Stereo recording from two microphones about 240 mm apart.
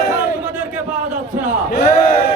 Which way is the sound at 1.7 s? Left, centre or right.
Left.